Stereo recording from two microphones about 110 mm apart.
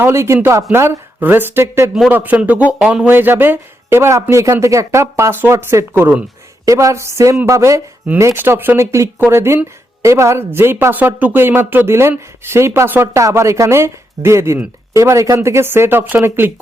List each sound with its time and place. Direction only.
0.0 s speech: 25° right (ahead or behind)
6.7 s speech: 30° right (ahead or behind)